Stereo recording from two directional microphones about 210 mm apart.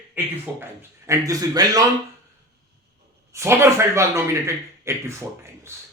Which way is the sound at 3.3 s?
15° right (ahead or behind).